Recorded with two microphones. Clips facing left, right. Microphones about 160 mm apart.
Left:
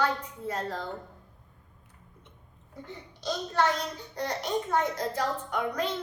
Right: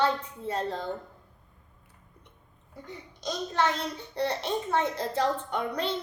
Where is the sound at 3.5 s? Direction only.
30° right (ahead or behind).